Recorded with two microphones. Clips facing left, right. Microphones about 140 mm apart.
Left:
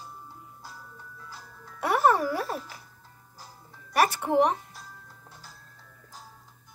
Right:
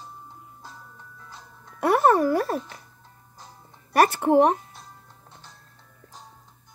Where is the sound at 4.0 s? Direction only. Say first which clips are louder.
Right 5 dB; 50° right (ahead or behind).